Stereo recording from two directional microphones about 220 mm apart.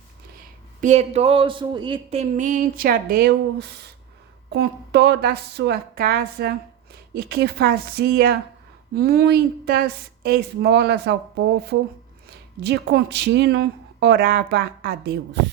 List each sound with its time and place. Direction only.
0.8 s speech: 30° right (ahead or behind)